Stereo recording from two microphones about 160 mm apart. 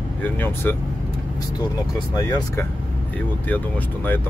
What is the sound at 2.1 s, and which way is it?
Speech, 20° left (ahead or behind).